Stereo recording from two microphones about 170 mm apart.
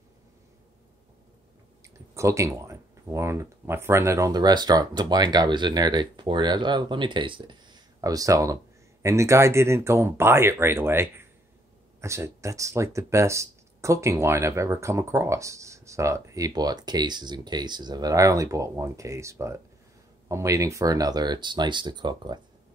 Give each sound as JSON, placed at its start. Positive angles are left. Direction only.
{"t": 1.8, "sound": "speech", "side_deg": -15}